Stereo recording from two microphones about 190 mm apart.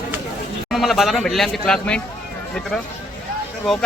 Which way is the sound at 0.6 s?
Centre (ahead or behind).